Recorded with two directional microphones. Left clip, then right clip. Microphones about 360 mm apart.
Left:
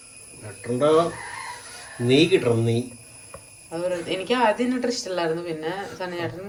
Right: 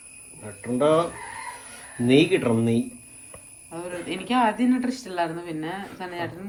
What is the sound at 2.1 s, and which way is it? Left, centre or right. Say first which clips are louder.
Speech: left 1 dB; centre.